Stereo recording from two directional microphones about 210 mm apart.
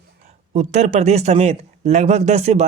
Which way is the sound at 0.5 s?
35° right (ahead or behind).